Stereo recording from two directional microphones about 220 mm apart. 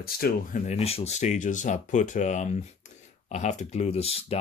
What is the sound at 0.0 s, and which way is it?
Speech, 40° left (ahead or behind).